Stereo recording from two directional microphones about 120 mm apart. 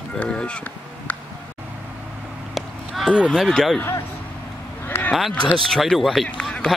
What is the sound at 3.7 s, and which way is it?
Speech, 20° left (ahead or behind).